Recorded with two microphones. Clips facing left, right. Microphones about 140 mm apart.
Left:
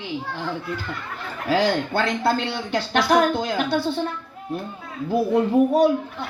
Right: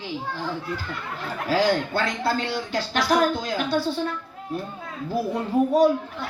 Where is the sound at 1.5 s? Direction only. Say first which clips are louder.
Left 1 dB; 60° left (ahead or behind).